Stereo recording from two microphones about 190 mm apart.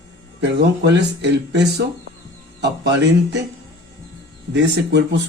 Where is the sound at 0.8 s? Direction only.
65° right (ahead or behind).